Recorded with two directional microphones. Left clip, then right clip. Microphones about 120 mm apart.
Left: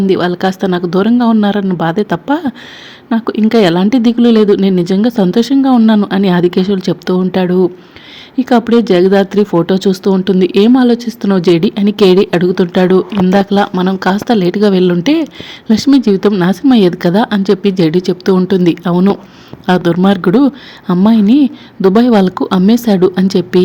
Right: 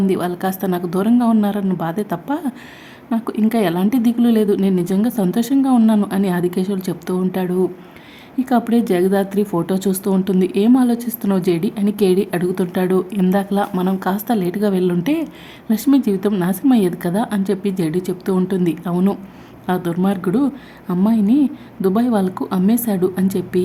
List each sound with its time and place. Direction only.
0.0 s a woman's voice: 25° left (ahead or behind)